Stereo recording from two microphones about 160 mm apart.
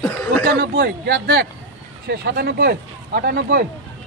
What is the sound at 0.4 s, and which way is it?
Speech, 75° right (ahead or behind).